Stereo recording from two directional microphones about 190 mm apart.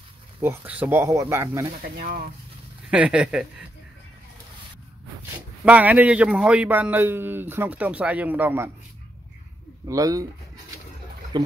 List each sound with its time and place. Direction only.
0.4 s a man's voice: 10° right (ahead or behind)
1.8 s speech: 50° right (ahead or behind)
2.9 s speech: 5° right (ahead or behind)
5.7 s a man's voice: 10° right (ahead or behind)
9.8 s a man's voice: 20° right (ahead or behind)